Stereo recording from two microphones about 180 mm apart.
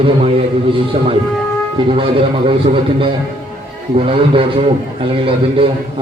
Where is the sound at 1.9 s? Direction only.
30° right (ahead or behind).